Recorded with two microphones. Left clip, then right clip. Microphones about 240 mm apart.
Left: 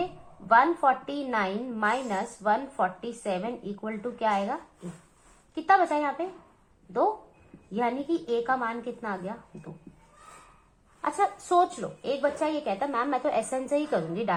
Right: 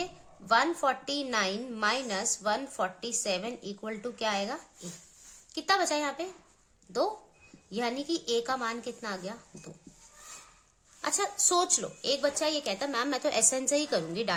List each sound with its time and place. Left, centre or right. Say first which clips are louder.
0.4 s a woman's voice: left 5 dB; right
7.7 s a woman's voice: left 4 dB; right
11.0 s a woman's voice: left 3 dB; right